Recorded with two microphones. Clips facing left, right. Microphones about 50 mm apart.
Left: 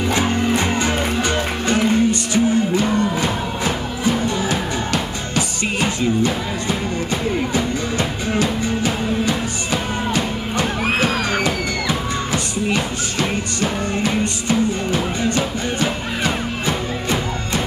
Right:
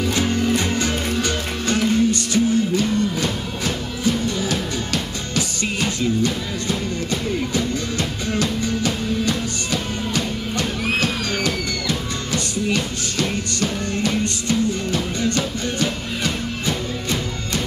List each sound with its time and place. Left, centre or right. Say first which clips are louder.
0.1 s music: left 3 dB; left